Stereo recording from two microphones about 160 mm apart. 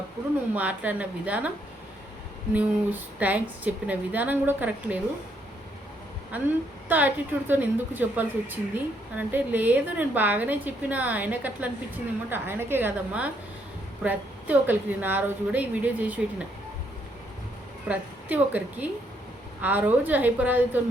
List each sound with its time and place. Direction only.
0.5 s speech: 10° right (ahead or behind)
2.5 s speech: 10° right (ahead or behind)
6.3 s speech: 10° right (ahead or behind)
17.8 s a woman's voice: 10° right (ahead or behind)